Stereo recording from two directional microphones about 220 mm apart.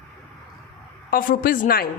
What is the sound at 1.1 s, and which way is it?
Speech, 40° left (ahead or behind).